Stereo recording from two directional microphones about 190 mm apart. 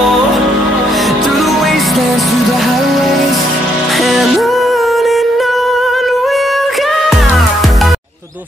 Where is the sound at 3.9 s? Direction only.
Centre (ahead or behind).